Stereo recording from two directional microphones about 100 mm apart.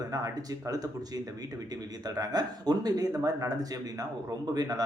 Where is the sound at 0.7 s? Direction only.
35° right (ahead or behind).